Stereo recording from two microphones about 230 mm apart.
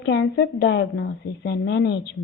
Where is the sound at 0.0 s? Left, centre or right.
Left.